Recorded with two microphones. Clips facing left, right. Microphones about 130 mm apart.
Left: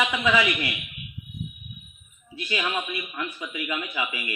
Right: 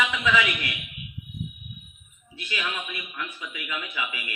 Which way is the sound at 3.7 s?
35° left (ahead or behind).